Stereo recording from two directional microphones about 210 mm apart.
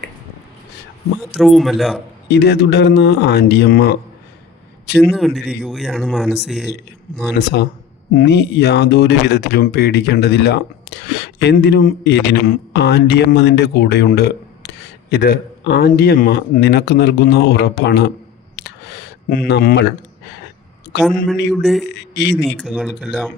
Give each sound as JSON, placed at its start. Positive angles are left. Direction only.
{"t": 1.2, "sound": "speech", "side_deg": 0}
{"t": 2.2, "sound": "speech", "side_deg": 50}
{"t": 5.0, "sound": "speech", "side_deg": 0}
{"t": 7.3, "sound": "speech", "side_deg": 50}
{"t": 18.5, "sound": "a sound", "side_deg": 55}
{"t": 20.9, "sound": "speech", "side_deg": 55}
{"t": 21.5, "sound": "speech", "side_deg": 0}
{"t": 21.9, "sound": "speech", "side_deg": 55}
{"t": 22.6, "sound": "speech", "side_deg": 0}